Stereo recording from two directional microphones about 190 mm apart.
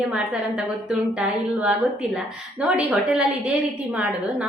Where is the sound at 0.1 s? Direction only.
5° right (ahead or behind).